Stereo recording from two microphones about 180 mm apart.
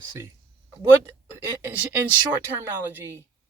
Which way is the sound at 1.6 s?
10° right (ahead or behind).